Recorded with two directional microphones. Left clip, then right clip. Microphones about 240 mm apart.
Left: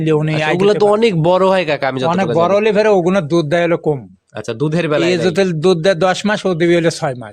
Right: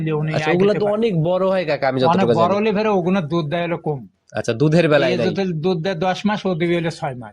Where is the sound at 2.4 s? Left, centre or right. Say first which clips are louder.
Left 6 dB; left.